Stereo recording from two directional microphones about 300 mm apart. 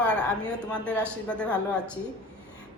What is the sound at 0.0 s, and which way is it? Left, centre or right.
A woman's voice, centre.